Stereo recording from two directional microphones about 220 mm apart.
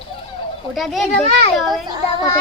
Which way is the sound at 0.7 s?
Centre (ahead or behind).